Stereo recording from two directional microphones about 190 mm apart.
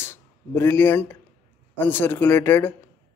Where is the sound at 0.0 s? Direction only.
15° left (ahead or behind).